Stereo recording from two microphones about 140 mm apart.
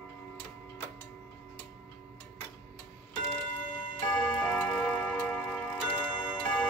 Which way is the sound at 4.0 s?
20° left (ahead or behind).